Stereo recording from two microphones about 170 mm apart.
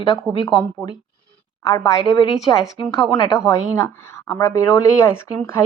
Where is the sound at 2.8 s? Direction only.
25° left (ahead or behind).